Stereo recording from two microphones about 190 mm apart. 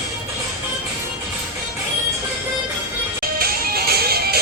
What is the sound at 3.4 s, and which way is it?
Music, 55° right (ahead or behind).